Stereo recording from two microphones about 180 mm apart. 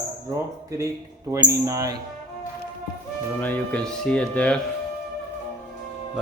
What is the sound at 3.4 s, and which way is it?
Speech, 10° left (ahead or behind).